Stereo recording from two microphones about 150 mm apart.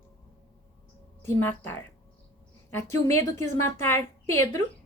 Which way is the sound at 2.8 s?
20° left (ahead or behind).